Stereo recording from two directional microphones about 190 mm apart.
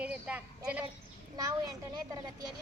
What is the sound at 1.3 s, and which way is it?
Speech, 20° right (ahead or behind).